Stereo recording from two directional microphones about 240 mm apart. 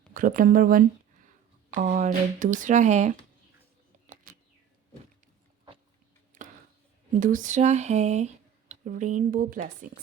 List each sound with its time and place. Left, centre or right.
0.1 s speech: right
4.0 s bird: right
7.1 s speech: right